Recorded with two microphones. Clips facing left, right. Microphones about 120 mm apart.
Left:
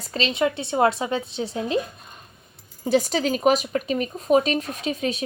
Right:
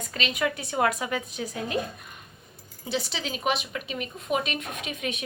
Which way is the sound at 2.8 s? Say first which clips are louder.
Left 10 dB; 45° left (ahead or behind).